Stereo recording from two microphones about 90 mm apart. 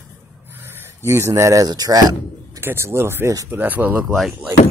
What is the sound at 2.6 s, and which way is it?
Speech, 30° right (ahead or behind).